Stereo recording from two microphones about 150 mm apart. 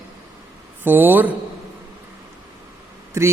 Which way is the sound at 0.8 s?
15° right (ahead or behind).